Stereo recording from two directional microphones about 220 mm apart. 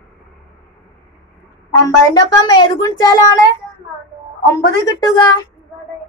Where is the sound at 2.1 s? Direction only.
20° left (ahead or behind).